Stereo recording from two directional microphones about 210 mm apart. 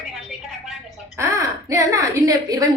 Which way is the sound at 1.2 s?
15° right (ahead or behind).